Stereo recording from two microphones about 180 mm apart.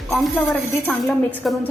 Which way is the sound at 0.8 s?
10° left (ahead or behind).